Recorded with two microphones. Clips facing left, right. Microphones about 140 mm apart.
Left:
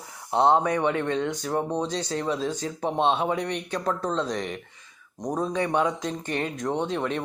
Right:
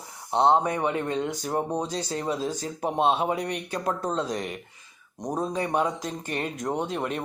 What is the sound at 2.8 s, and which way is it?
Speech, 10° right (ahead or behind).